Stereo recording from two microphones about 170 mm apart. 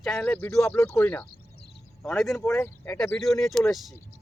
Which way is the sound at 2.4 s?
15° left (ahead or behind).